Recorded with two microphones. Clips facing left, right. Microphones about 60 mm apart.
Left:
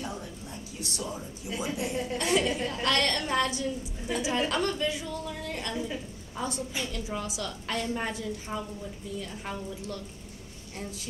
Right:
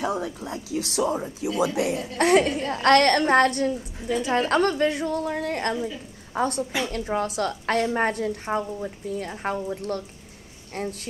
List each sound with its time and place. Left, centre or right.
0.0 s a woman's voice: right